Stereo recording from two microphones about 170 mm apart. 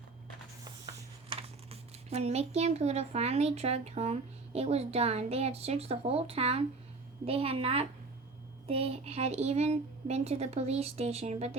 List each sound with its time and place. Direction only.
1.3 s a woman's voice: 35° right (ahead or behind)